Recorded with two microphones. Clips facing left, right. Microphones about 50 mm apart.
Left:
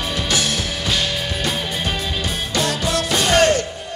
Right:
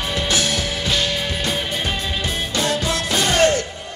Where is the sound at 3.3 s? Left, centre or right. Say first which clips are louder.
Left 1 dB; left.